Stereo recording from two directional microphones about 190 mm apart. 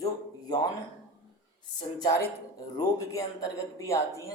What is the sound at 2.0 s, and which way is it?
A woman's voice, 20° left (ahead or behind).